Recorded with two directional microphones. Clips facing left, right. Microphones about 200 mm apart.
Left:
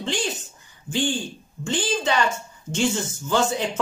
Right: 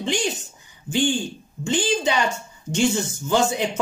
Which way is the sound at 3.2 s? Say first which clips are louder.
Right 1 dB; 15° right (ahead or behind).